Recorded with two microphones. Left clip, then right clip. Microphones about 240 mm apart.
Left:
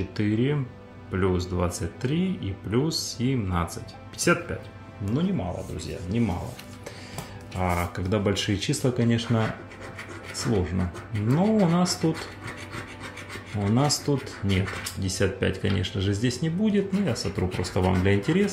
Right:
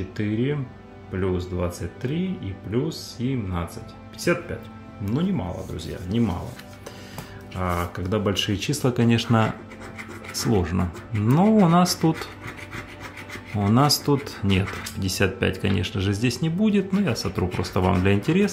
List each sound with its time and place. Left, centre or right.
0.2 s speech: centre
5.0 s speech: centre
7.5 s speech: centre; by 12.1 s right
13.6 s speech: right